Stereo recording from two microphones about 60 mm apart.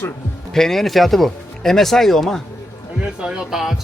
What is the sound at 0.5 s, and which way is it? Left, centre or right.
Speech, centre.